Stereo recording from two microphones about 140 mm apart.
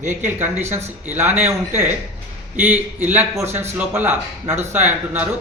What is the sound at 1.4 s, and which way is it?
Speech, 55° right (ahead or behind).